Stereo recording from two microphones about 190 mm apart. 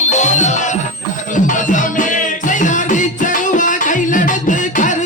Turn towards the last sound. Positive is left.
turn(degrees=40)  # may be behind; listen again after turning